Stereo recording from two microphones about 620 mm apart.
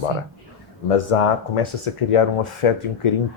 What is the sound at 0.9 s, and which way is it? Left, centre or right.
Speech, left.